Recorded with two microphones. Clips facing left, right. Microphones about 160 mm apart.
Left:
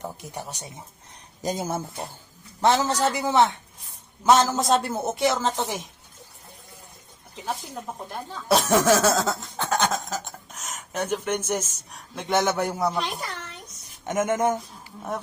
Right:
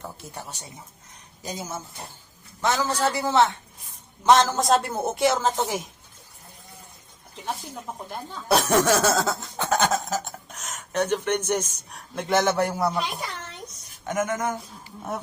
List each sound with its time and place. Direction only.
0.0 s speech: 15° left (ahead or behind)
1.4 s speech: 50° left (ahead or behind)
2.6 s a man's voice: 30° left (ahead or behind)
2.8 s a man's voice: 20° left (ahead or behind)
4.4 s speech: centre (ahead or behind)
8.4 s snicker: centre (ahead or behind)
14.0 s a man's voice: 25° left (ahead or behind)